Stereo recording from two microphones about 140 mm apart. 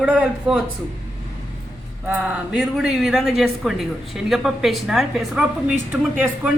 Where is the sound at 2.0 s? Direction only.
5° right (ahead or behind).